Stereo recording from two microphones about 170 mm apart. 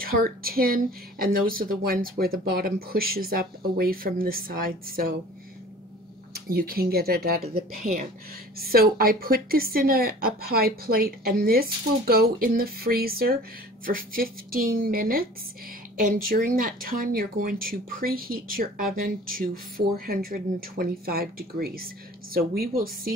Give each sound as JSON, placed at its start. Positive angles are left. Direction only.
{"t": 0.0, "sound": "a woman's voice", "side_deg": -60}
{"t": 6.3, "sound": "a woman's voice", "side_deg": -60}